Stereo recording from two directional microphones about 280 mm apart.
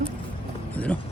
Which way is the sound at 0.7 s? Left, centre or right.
Centre.